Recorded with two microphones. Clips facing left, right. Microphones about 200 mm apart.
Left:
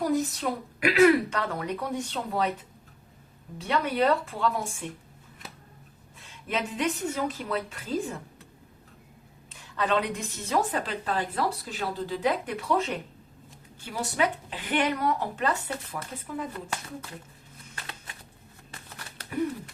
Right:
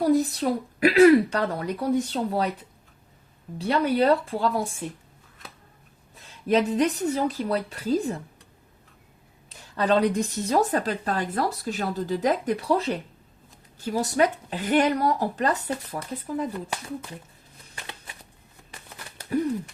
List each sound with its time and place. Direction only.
0.0 s a woman's voice: 35° right (ahead or behind)
3.6 s a woman's voice: 35° right (ahead or behind)
6.1 s a woman's voice: 40° right (ahead or behind)
9.5 s a woman's voice: 40° right (ahead or behind)
18.7 s a sound: 10° right (ahead or behind)